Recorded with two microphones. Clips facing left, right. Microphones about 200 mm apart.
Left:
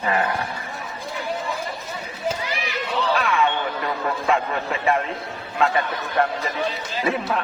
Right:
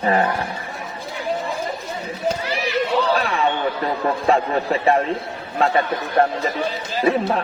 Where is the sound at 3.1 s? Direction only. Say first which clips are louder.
Right 1 dB; 35° right (ahead or behind).